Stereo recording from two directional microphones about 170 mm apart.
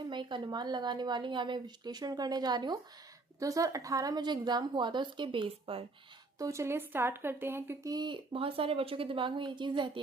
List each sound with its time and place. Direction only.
0.1 s speech: 25° right (ahead or behind)
6.4 s speech: 15° right (ahead or behind)